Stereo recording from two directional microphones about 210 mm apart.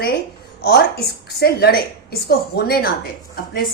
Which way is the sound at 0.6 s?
45° left (ahead or behind).